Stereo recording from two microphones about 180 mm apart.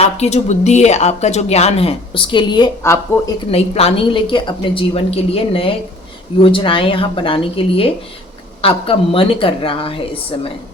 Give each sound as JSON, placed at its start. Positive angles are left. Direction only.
{"t": 0.0, "sound": "speech", "side_deg": 35}
{"t": 2.8, "sound": "speech", "side_deg": 15}
{"t": 3.5, "sound": "speech", "side_deg": 35}